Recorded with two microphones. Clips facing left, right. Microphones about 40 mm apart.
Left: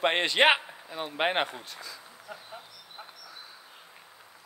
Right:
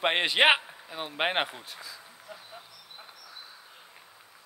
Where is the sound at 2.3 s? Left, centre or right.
Centre.